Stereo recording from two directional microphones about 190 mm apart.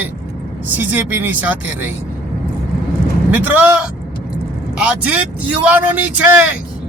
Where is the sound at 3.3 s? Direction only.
10° right (ahead or behind).